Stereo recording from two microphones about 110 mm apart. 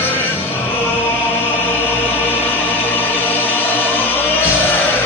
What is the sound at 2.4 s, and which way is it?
Music, 15° left (ahead or behind).